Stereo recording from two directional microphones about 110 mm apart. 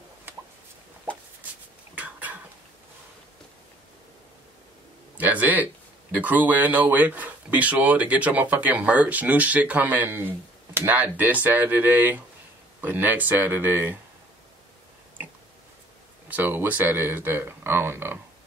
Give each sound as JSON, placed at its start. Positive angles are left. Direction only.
{"t": 2.0, "sound": "a sound", "side_deg": -15}
{"t": 5.1, "sound": "speech", "side_deg": -15}
{"t": 16.3, "sound": "speech", "side_deg": -15}